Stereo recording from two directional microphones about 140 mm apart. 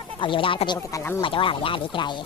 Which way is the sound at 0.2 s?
40° left (ahead or behind).